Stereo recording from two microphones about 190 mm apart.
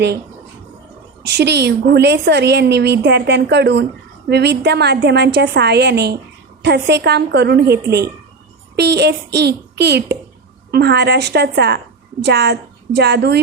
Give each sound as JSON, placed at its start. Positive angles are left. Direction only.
{"t": 1.2, "sound": "a woman's voice", "side_deg": -60}